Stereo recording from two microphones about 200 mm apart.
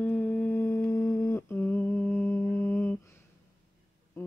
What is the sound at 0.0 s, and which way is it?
Humming, 10° left (ahead or behind).